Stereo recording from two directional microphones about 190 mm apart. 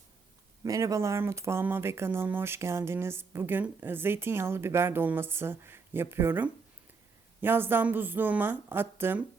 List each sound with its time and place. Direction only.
0.6 s speech: 15° right (ahead or behind)